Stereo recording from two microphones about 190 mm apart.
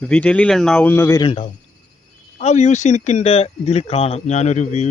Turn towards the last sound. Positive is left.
turn(degrees=40)  # may be behind; listen again after turning